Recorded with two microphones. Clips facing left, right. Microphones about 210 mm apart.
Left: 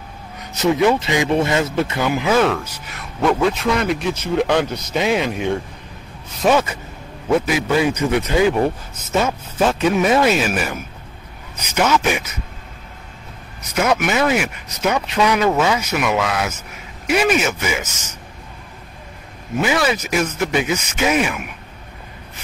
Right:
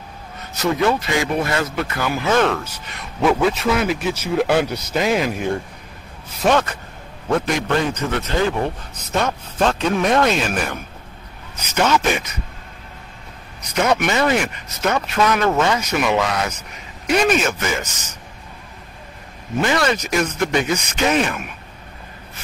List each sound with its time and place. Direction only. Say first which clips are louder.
0.4 s speech: left 3 dB; 15° left (ahead or behind)
2.3 s speech: right 1 dB; 5° left (ahead or behind)
13.7 s speech: even; 5° left (ahead or behind)
19.6 s speech: even; 5° left (ahead or behind)